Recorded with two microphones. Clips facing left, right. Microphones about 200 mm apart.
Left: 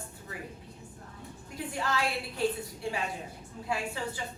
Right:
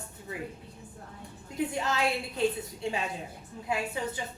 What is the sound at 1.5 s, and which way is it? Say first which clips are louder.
Speech: right 3 dB; 20° right (ahead or behind).